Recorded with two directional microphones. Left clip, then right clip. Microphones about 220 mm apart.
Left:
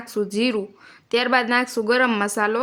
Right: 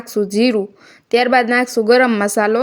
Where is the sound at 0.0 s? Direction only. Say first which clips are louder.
Right 7 dB; 20° right (ahead or behind).